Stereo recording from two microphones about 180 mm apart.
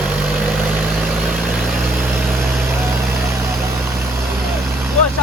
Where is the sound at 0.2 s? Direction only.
5° right (ahead or behind).